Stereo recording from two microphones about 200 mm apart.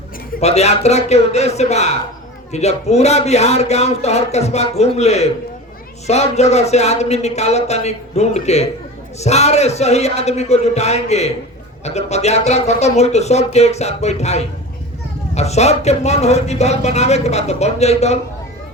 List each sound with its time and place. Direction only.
0.3 s speech: 30° left (ahead or behind)